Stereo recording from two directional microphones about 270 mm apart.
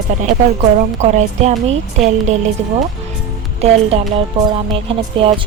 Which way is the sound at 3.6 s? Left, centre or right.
Right.